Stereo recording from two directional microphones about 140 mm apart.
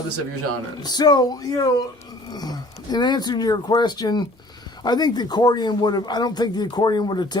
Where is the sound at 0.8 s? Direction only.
30° left (ahead or behind).